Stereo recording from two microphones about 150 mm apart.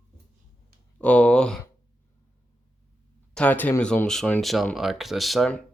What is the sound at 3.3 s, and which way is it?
Speech, 10° left (ahead or behind).